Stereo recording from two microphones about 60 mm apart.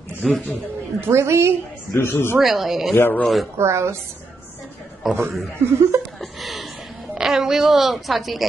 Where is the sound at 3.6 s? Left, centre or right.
Right.